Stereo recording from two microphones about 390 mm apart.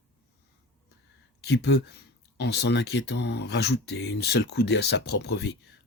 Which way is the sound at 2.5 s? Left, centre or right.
Left.